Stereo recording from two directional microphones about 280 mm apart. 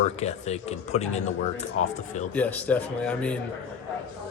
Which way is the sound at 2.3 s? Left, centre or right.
Centre.